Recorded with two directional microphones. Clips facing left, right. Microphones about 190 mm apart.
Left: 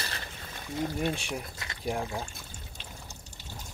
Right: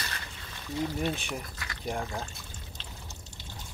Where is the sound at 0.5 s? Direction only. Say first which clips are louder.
Even; 50° left (ahead or behind).